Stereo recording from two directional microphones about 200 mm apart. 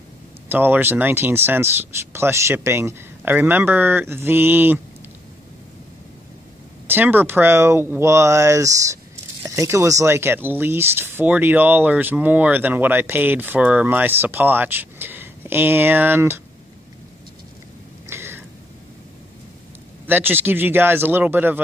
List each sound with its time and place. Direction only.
0.5 s speech: 10° right (ahead or behind)
6.9 s speech: 10° right (ahead or behind)
18.0 s a sound: 10° right (ahead or behind)
20.1 s speech: 10° right (ahead or behind)